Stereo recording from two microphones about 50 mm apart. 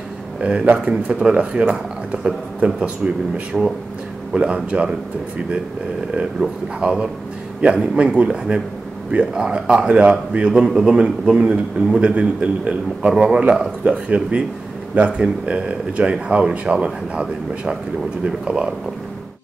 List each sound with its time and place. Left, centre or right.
0.4 s a man's voice: right
3.5 s speech: centre
4.3 s speech: right
6.8 s a man's voice: centre